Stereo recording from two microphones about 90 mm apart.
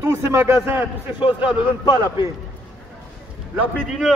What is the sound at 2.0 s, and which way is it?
Speech, 35° right (ahead or behind).